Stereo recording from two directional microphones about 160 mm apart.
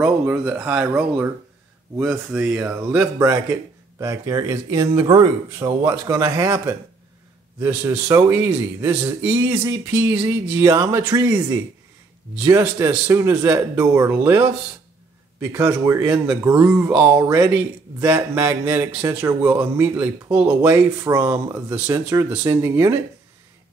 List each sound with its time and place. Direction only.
0.2 s a man's voice: 10° right (ahead or behind)
15.5 s a man's voice: 15° right (ahead or behind)
19.8 s a man's voice: 10° right (ahead or behind)